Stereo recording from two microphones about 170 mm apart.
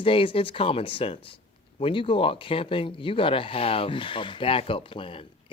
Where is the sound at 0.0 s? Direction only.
30° left (ahead or behind).